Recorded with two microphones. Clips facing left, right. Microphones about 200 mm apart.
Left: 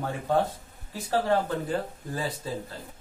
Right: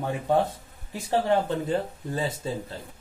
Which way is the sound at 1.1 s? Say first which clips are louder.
Right 2 dB; 25° right (ahead or behind).